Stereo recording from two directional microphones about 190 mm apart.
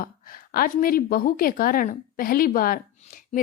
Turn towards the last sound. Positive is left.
turn(degrees=45)  # may be behind; listen again after turning